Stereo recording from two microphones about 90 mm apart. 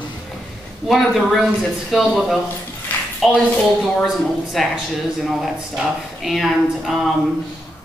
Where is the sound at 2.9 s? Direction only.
20° left (ahead or behind).